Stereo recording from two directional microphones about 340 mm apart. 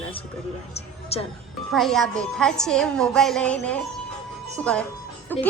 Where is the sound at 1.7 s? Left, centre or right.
Centre.